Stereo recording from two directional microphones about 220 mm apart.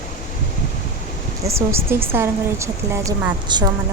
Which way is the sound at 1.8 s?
10° right (ahead or behind).